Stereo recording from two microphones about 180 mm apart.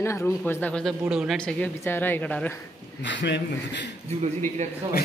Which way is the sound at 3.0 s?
80° left.